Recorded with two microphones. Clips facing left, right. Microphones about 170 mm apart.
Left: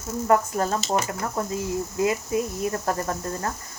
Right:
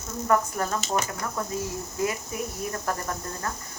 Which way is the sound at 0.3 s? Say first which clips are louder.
Left 3 dB; 35° left (ahead or behind).